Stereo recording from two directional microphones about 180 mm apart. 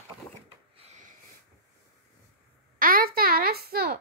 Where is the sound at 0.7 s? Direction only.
40° right (ahead or behind).